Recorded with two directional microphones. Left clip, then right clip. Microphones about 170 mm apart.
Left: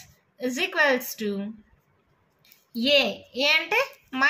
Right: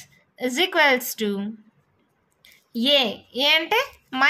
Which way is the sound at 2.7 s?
45° right (ahead or behind).